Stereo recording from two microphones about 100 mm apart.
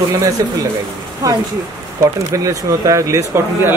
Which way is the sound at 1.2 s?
35° right (ahead or behind).